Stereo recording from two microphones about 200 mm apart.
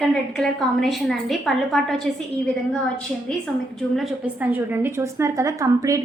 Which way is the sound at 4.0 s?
5° right (ahead or behind).